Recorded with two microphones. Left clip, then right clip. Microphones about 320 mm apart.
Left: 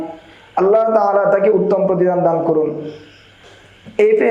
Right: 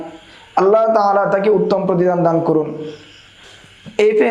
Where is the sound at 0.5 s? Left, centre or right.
Right.